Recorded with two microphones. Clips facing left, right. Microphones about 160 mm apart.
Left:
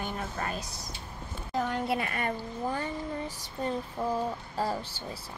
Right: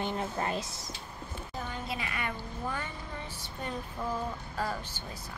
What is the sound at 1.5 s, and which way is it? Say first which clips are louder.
Speech: left 10 dB; 80° left.